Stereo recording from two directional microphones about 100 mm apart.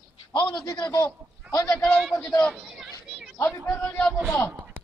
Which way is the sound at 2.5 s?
5° right (ahead or behind).